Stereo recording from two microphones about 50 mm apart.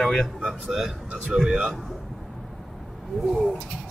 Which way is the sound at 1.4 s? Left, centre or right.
Centre.